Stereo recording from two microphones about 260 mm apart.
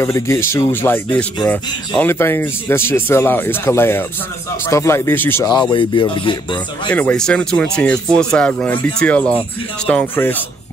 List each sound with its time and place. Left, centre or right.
0.0 s speech: centre
6.9 s speech: centre